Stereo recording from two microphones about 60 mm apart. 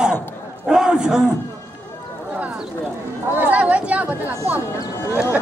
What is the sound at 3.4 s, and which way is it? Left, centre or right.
Speech, right.